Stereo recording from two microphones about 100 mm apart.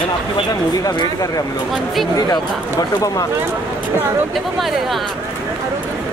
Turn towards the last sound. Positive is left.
turn(degrees=0)  # may be behind; listen again after turning